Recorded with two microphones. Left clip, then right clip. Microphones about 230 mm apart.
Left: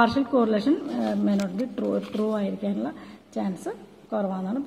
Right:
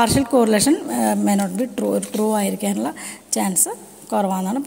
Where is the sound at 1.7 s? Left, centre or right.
Right.